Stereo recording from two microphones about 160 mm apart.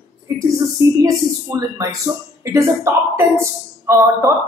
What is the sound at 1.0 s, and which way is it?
Speech, 20° right (ahead or behind).